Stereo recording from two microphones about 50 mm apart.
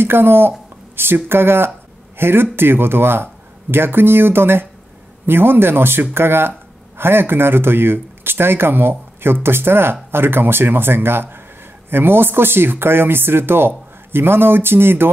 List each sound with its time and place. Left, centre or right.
0.0 s speech: right